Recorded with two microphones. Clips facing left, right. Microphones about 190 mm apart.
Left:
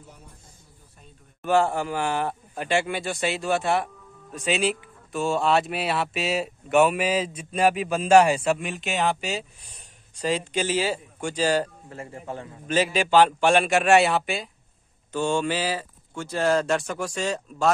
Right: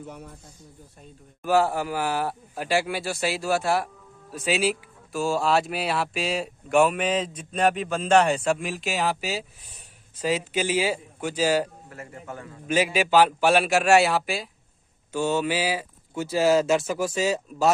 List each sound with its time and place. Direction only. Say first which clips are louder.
0.0 s speech: right 10 dB; 70° right (ahead or behind)
1.4 s a man's voice: even; 5° right (ahead or behind)
11.9 s a man's voice: left 3 dB; 30° left (ahead or behind)
12.6 s speech: even; 10° right (ahead or behind)